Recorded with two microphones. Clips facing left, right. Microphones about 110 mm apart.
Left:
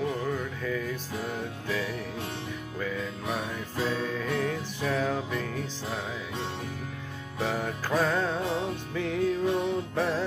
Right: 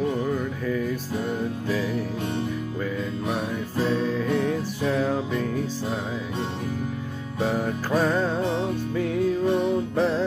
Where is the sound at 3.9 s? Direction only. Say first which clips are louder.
Right 6 dB; 20° right (ahead or behind).